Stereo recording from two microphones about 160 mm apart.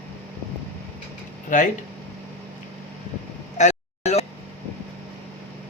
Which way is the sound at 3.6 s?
45° left (ahead or behind).